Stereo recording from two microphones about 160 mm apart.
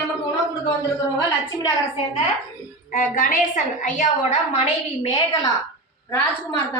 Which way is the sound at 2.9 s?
55° left (ahead or behind).